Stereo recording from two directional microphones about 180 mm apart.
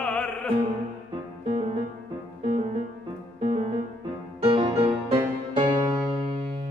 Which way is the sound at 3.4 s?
25° right (ahead or behind).